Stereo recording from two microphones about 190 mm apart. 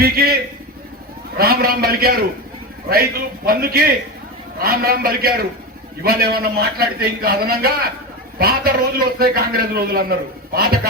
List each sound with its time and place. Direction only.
0.0 s a man's voice: 55° right (ahead or behind)
1.4 s a man's voice: 50° right (ahead or behind)